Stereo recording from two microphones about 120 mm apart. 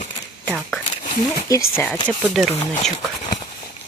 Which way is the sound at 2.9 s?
40° left (ahead or behind).